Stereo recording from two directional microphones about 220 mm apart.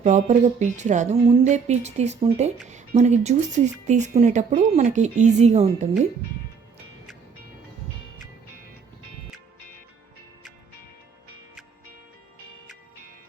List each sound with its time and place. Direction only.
0.0 s speech: 30° right (ahead or behind)